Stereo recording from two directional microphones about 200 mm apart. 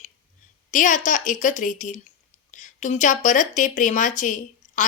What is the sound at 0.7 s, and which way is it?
A woman's voice, 40° left (ahead or behind).